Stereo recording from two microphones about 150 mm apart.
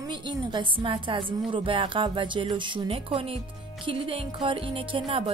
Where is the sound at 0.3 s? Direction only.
30° right (ahead or behind).